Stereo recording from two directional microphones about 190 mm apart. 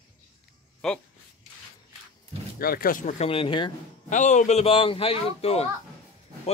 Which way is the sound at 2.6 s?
50° left (ahead or behind).